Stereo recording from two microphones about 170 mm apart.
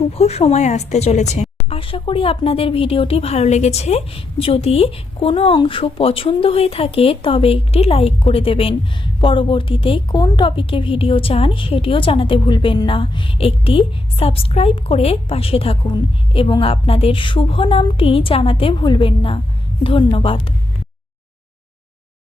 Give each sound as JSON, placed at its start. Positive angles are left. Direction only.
{"t": 0.1, "sound": "a woman's voice", "side_deg": 40}
{"t": 1.7, "sound": "a woman's voice", "side_deg": 30}